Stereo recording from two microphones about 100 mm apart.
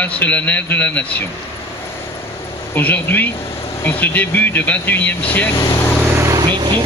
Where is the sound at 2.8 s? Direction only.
15° left (ahead or behind).